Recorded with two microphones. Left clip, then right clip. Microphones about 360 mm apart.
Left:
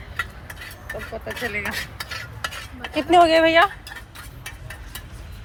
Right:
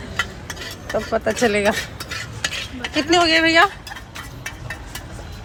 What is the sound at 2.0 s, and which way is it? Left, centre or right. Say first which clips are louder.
Stir: right 4 dB; left.